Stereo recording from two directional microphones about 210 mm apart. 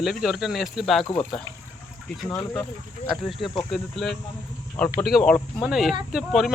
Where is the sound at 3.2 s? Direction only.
Centre (ahead or behind).